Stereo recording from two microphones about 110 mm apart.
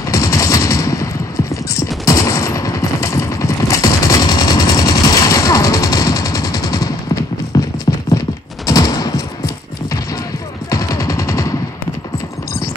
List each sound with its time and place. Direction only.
0.1 s machine gun: 30° left (ahead or behind)
2.0 s gunshot: 30° left (ahead or behind)
7.5 s clip-clop: 30° left (ahead or behind)
8.6 s a sound: 35° left (ahead or behind)
10.7 s machine gun: 35° left (ahead or behind)